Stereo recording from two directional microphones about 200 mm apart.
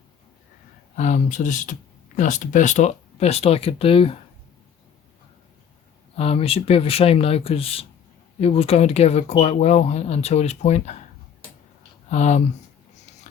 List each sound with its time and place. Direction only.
0.9 s speech: 40° left (ahead or behind)
6.1 s speech: 30° left (ahead or behind)
12.1 s speech: 35° left (ahead or behind)